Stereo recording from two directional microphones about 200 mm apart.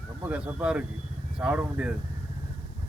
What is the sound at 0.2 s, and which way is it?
Speech, 5° right (ahead or behind).